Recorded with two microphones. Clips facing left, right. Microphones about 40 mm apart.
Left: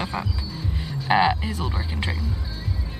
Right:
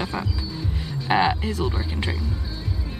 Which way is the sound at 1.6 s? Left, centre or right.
Centre.